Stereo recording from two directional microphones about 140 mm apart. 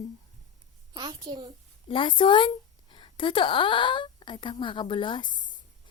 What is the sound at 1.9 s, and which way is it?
A woman's voice, 35° left (ahead or behind).